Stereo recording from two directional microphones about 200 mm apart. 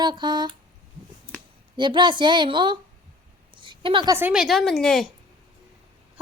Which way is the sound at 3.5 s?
25° right (ahead or behind).